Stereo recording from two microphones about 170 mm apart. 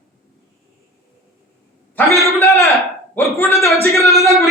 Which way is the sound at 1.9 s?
20° left (ahead or behind).